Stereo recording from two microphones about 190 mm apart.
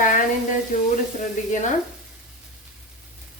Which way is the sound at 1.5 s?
40° left (ahead or behind).